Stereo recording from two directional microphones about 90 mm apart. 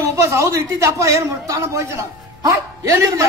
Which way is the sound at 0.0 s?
35° right (ahead or behind).